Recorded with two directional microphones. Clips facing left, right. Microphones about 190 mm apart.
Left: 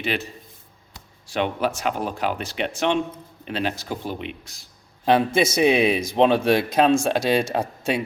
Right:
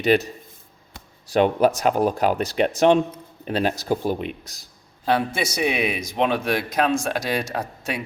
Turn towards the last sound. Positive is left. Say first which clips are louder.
# left 4 dB
turn(degrees=25)  # may be behind; listen again after turning